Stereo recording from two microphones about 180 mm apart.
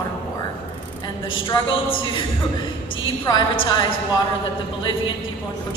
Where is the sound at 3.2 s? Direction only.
25° left (ahead or behind).